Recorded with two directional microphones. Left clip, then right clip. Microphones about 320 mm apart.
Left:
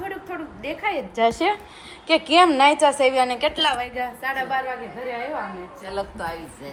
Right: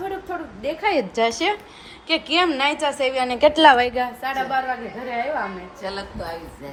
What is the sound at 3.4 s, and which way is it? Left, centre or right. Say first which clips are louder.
Speech: right 8 dB; right.